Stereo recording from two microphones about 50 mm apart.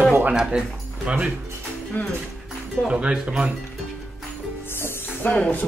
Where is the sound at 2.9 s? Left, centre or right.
Right.